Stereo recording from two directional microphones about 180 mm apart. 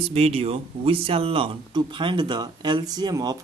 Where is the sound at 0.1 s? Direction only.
35° right (ahead or behind).